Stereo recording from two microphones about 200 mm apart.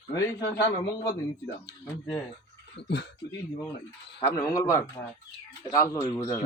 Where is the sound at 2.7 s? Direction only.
60° left (ahead or behind).